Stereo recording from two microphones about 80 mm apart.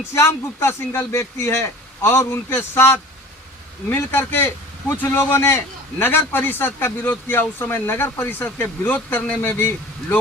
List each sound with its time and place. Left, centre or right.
0.1 s a man's voice: left